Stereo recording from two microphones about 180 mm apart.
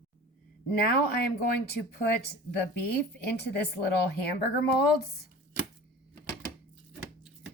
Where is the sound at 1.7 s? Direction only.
60° left (ahead or behind).